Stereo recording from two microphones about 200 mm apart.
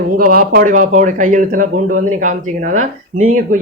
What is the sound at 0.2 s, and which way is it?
A man's voice, 45° right (ahead or behind).